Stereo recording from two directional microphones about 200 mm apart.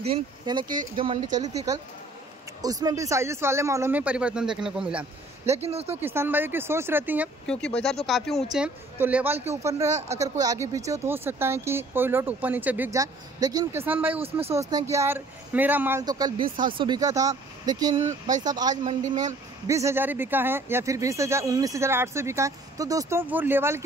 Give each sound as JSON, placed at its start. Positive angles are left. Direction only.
{"t": 0.0, "sound": "speech", "side_deg": -25}
{"t": 5.5, "sound": "speech", "side_deg": -30}
{"t": 5.9, "sound": "speech", "side_deg": -10}
{"t": 7.4, "sound": "a woman's voice", "side_deg": 5}